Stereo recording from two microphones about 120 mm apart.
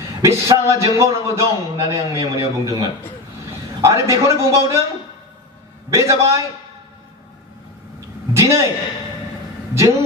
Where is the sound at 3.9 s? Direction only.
25° right (ahead or behind).